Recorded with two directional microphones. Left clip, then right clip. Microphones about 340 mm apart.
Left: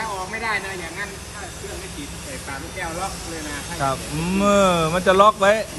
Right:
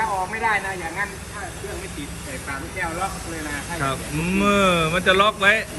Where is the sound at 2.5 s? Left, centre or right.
Centre.